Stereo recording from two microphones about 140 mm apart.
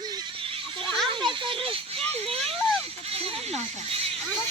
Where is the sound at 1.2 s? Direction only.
35° right (ahead or behind).